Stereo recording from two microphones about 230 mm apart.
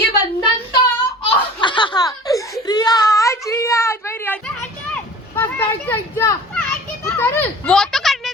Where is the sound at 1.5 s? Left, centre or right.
Centre.